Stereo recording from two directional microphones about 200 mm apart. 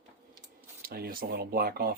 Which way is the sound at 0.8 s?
50° right (ahead or behind).